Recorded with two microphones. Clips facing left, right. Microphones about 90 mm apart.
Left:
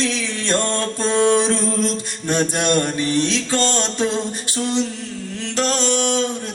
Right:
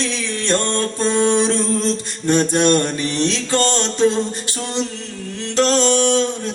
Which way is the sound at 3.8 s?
15° left (ahead or behind).